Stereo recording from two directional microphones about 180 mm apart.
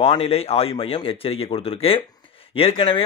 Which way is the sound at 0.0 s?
35° left (ahead or behind).